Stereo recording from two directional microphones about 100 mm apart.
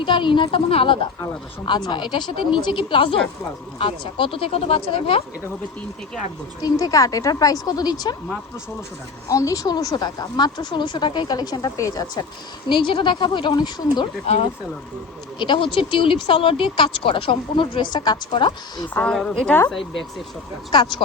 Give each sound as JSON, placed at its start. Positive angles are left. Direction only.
{"t": 0.0, "sound": "speech", "side_deg": 55}
{"t": 1.6, "sound": "speech", "side_deg": 50}
{"t": 6.6, "sound": "a woman's voice", "side_deg": 40}
{"t": 9.3, "sound": "speech", "side_deg": 35}
{"t": 12.6, "sound": "speech", "side_deg": 55}
{"t": 15.4, "sound": "speech", "side_deg": 55}
{"t": 19.0, "sound": "a woman's voice", "side_deg": 10}
{"t": 20.7, "sound": "speech", "side_deg": 50}